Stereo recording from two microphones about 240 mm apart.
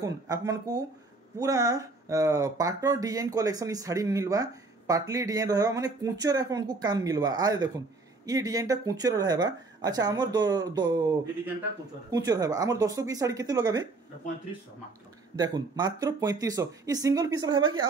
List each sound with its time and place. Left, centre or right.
0.0 s speech: centre
15.3 s speech: centre